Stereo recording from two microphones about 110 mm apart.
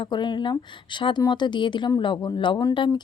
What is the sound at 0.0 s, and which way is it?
Speech, 45° left (ahead or behind).